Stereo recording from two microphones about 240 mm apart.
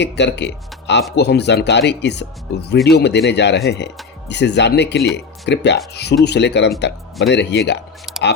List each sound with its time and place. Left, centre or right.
0.0 s speech: left